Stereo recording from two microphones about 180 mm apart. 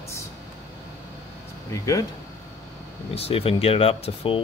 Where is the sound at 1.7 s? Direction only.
20° left (ahead or behind).